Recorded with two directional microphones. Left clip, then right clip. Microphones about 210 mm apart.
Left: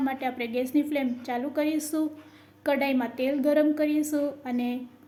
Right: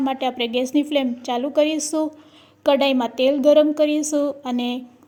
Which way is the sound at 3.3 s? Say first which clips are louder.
Right 9 dB; 30° right (ahead or behind).